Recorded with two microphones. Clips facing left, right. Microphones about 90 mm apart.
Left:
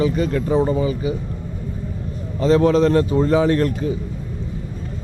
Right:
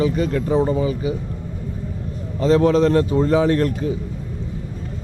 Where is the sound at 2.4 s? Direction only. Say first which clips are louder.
Even; 20° left (ahead or behind).